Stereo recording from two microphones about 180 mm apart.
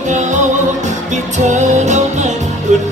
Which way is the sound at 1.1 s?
40° right (ahead or behind).